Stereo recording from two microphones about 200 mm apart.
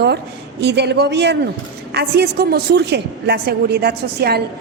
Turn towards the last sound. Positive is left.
turn(degrees=-50)  # may be behind; listen again after turning